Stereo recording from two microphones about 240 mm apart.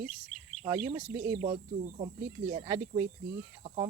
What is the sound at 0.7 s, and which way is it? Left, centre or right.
Speech, centre.